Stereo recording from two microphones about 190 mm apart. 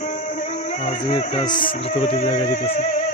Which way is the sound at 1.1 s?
25° left (ahead or behind).